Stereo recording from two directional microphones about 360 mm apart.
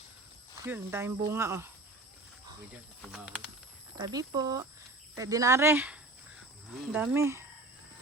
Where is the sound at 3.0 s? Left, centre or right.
Centre.